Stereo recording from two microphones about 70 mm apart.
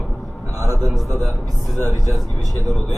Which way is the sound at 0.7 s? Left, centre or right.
Right.